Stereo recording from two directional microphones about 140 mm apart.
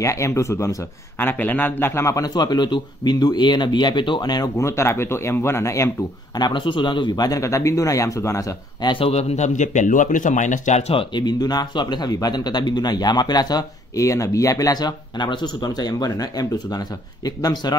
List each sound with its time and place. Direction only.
0.0 s speech: 20° left (ahead or behind)
6.3 s speech: 35° left (ahead or behind)
8.9 s speech: 45° left (ahead or behind); by 17.7 s 30° left (ahead or behind)